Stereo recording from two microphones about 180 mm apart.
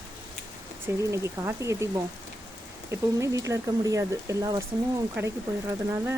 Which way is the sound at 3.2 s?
15° right (ahead or behind).